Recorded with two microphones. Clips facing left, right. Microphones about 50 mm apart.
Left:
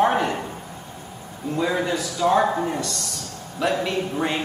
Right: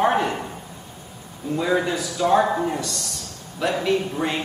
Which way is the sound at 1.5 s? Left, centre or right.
Centre.